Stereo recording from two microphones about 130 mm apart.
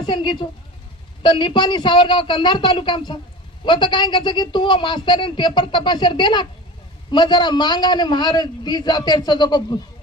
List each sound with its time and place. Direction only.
0.0 s a woman's voice: 35° left (ahead or behind)